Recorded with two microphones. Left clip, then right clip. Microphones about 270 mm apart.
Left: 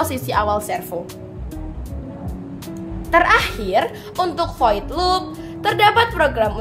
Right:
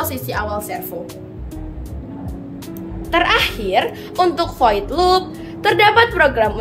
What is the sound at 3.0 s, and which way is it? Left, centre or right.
A woman's voice, left.